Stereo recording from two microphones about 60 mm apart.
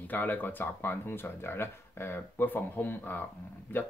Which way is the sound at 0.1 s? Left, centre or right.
Left.